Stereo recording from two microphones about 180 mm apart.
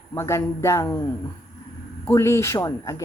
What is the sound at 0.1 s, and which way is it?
Speech, 15° left (ahead or behind).